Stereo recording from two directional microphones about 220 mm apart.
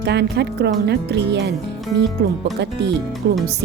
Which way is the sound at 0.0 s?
50° right (ahead or behind).